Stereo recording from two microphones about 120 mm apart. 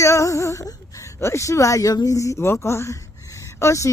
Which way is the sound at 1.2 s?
25° left (ahead or behind).